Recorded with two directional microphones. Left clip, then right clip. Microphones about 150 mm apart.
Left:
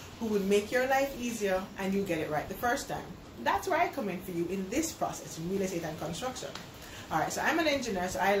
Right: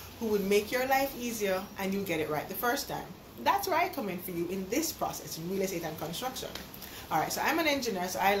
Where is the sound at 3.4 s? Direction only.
15° left (ahead or behind).